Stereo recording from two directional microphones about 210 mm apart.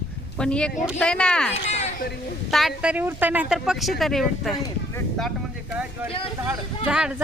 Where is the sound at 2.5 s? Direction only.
Centre (ahead or behind).